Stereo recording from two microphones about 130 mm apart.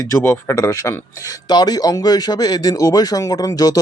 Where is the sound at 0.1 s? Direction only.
20° left (ahead or behind).